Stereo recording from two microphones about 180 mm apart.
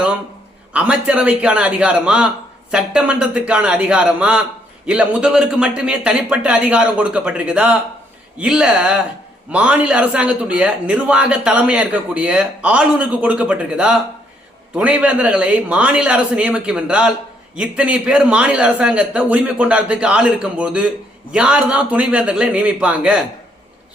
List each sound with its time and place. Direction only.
0.7 s a man's voice: 5° right (ahead or behind)